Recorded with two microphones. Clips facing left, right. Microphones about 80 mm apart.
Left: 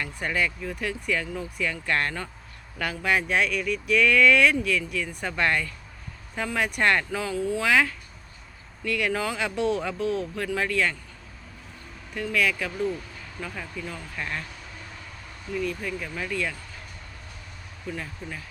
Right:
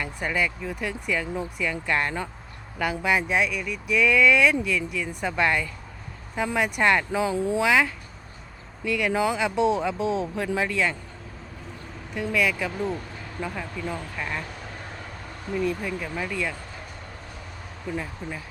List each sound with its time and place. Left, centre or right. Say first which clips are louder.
0.0 s speech: right 1 dB; centre
7.1 s speech: right 3 dB; right
7.6 s speech: even; centre
12.1 s speech: right 1 dB; centre
14.2 s speech: left 2 dB; centre
15.5 s speech: right 2 dB; right
15.8 s speech: right 2 dB; centre
17.9 s speech: right 6 dB; centre